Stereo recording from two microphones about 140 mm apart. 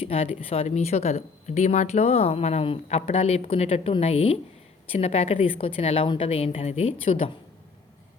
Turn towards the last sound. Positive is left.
turn(degrees=40)  # may be behind; listen again after turning